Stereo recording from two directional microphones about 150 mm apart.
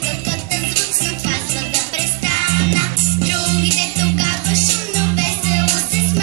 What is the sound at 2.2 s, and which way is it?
Music, 45° right (ahead or behind).